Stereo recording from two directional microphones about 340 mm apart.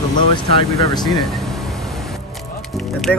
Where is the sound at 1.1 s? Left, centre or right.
Centre.